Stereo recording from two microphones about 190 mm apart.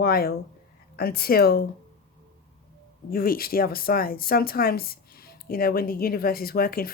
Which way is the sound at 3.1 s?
50° left (ahead or behind).